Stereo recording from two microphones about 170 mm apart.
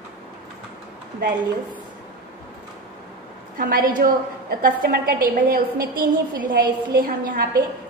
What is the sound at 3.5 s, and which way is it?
A woman's voice, 55° right (ahead or behind).